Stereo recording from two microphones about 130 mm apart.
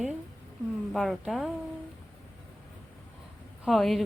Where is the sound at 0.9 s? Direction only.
Centre (ahead or behind).